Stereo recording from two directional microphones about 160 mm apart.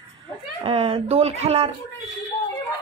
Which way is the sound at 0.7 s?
35° right (ahead or behind).